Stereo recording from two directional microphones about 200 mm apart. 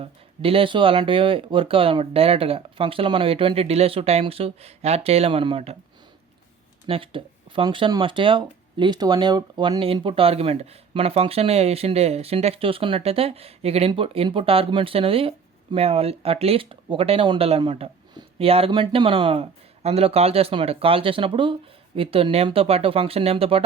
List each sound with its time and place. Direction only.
0.0 s speech: 30° right (ahead or behind)
6.8 s speech: 25° right (ahead or behind)